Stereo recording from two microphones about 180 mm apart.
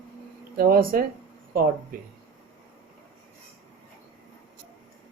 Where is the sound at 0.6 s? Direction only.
55° right (ahead or behind).